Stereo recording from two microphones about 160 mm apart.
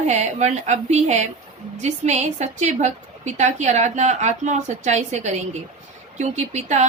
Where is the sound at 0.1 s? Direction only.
45° right (ahead or behind).